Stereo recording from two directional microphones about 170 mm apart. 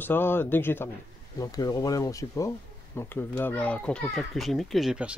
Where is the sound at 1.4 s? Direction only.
25° left (ahead or behind).